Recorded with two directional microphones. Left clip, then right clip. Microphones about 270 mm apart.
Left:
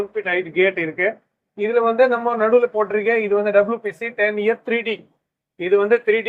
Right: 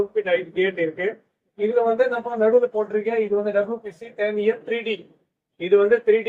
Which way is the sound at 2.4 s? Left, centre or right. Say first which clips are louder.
Even; left.